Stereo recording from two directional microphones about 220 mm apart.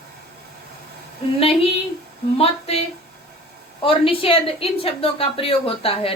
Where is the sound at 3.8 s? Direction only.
25° left (ahead or behind).